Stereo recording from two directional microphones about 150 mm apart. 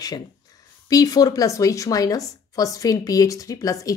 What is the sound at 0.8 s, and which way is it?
A woman's voice, 25° left (ahead or behind).